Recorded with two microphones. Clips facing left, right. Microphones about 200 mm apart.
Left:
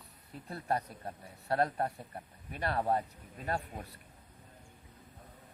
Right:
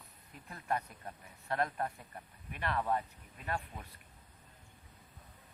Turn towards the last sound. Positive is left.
turn(degrees=35)  # may be behind; listen again after turning